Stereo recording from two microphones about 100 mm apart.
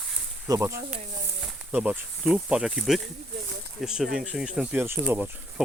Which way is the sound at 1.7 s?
15° right (ahead or behind).